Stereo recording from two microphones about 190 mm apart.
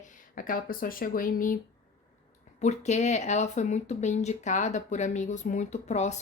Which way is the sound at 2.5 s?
35° left (ahead or behind).